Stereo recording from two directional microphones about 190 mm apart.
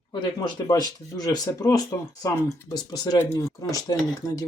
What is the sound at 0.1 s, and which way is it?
Speech, 25° left (ahead or behind).